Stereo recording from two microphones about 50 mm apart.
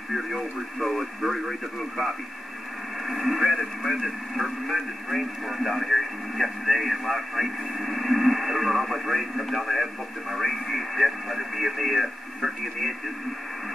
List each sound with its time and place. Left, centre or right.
0.1 s speech: centre